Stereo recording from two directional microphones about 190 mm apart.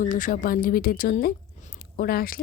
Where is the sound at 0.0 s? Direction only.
45° left (ahead or behind).